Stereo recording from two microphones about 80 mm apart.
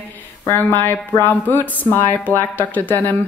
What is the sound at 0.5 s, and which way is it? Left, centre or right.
A woman's voice, left.